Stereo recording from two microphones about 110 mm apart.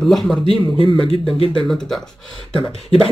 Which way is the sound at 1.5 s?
5° left (ahead or behind).